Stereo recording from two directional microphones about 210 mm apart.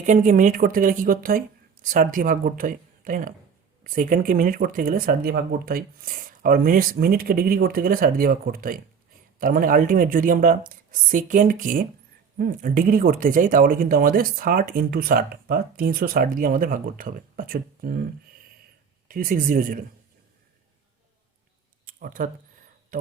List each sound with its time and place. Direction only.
0.0 s speech: 35° right (ahead or behind)
19.0 s speech: 40° right (ahead or behind)
21.8 s a sound: 40° right (ahead or behind)